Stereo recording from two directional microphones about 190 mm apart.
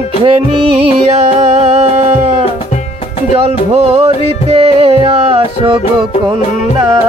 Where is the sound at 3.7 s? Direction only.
35° right (ahead or behind).